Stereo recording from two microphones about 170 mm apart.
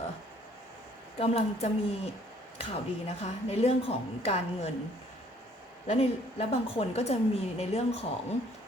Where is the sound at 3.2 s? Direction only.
40° left (ahead or behind).